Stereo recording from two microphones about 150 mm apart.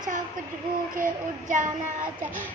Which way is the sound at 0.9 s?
65° right (ahead or behind).